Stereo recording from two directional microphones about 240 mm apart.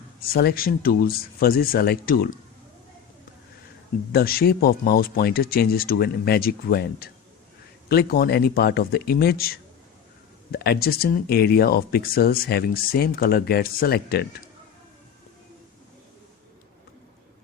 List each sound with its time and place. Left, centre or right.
0.3 s speech: left
4.1 s speech: left